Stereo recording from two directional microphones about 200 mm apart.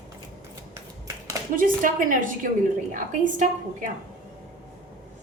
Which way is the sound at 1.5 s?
40° right (ahead or behind).